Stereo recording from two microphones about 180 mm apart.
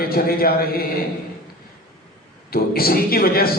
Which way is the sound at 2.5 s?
55° left (ahead or behind).